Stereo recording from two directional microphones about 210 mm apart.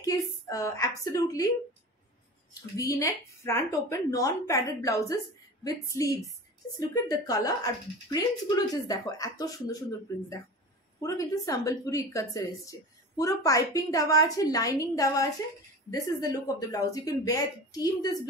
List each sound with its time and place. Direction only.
0.0 s a woman's voice: 15° left (ahead or behind)
2.8 s a woman's voice: 15° left (ahead or behind)
11.0 s a woman's voice: 15° left (ahead or behind)